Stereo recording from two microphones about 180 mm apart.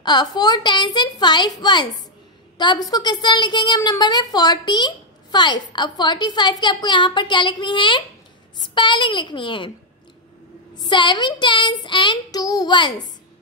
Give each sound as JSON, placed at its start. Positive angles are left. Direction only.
{"t": 0.0, "sound": "a woman's voice", "side_deg": 25}
{"t": 10.8, "sound": "a woman's voice", "side_deg": 25}